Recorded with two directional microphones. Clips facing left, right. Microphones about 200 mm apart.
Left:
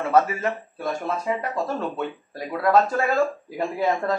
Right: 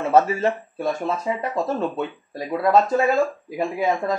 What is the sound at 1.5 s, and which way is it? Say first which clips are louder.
Speech: right 3 dB; 20° right (ahead or behind).